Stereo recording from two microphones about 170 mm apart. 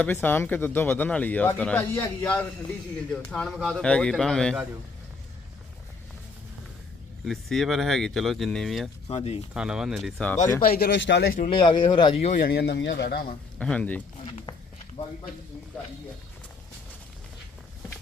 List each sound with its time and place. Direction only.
0.0 s speech: 10° left (ahead or behind)
7.3 s speech: centre (ahead or behind)
9.0 s speech: 35° left (ahead or behind)
9.6 s speech: 5° right (ahead or behind)
10.6 s speech: 65° left (ahead or behind)
11.4 s speech: 30° left (ahead or behind)
12.4 s speech: 70° left (ahead or behind); by 12.9 s 85° left
13.0 s speech: 65° left (ahead or behind)
13.6 s speech: 5° left (ahead or behind)